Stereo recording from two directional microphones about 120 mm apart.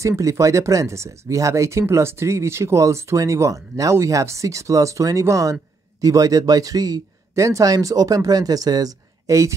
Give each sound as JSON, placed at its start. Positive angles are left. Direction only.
{"t": 0.0, "sound": "speech", "side_deg": -25}